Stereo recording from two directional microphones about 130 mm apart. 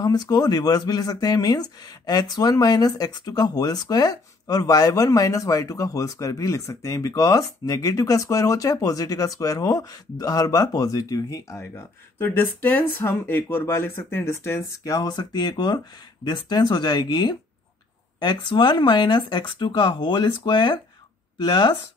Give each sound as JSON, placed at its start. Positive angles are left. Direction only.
{"t": 0.0, "sound": "speech", "side_deg": 30}
{"t": 14.8, "sound": "speech", "side_deg": 30}